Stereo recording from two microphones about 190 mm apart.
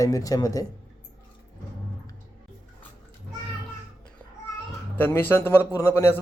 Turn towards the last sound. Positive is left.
turn(degrees=10)  # may be behind; listen again after turning